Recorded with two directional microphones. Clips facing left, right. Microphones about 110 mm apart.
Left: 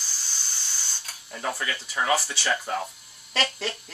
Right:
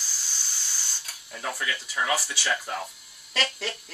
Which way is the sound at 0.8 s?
Centre (ahead or behind).